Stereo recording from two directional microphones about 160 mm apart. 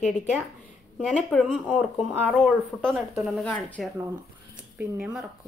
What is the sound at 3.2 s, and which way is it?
Speech, 5° left (ahead or behind).